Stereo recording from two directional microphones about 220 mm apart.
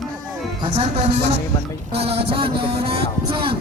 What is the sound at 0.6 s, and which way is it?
Speech, 25° right (ahead or behind).